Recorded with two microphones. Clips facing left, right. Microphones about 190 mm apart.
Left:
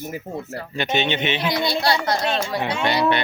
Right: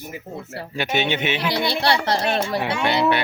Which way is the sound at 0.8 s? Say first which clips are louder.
Even; 10° right (ahead or behind).